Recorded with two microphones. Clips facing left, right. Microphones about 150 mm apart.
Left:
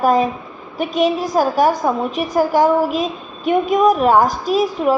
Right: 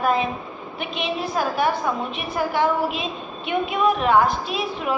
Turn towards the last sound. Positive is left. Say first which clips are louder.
# left 9 dB
turn(degrees=40)  # may be behind; listen again after turning